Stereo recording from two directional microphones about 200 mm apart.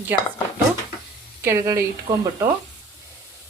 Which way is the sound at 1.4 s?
15° right (ahead or behind).